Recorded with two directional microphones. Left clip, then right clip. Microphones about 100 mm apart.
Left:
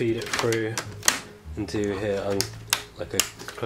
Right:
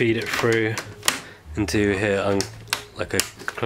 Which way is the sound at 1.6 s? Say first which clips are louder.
Right 6 dB; 45° right (ahead or behind).